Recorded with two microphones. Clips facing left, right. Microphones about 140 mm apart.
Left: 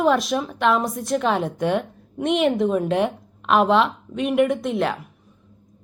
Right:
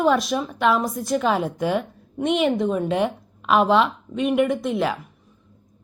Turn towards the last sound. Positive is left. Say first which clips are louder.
# even
turn(degrees=0)  # may be behind; listen again after turning